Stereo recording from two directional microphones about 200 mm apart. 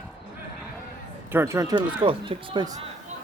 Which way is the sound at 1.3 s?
10° right (ahead or behind).